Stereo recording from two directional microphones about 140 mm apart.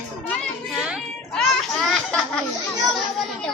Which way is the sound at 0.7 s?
5° right (ahead or behind).